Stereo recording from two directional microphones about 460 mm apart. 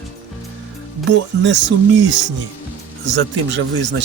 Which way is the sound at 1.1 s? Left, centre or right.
Right.